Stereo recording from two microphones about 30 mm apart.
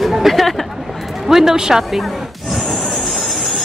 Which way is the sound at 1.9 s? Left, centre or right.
Centre.